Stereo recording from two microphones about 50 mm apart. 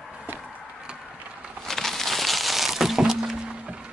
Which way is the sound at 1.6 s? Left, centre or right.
Centre.